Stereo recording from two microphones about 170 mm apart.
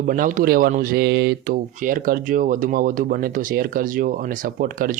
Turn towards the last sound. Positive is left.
turn(degrees=-60)  # may be behind; listen again after turning